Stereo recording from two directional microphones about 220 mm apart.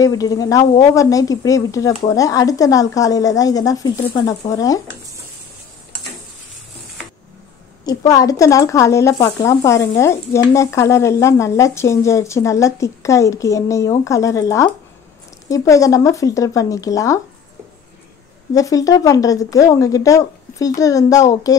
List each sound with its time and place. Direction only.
0.0 s speech: 15° left (ahead or behind)
7.8 s speech: 15° left (ahead or behind)
18.5 s speech: 15° left (ahead or behind)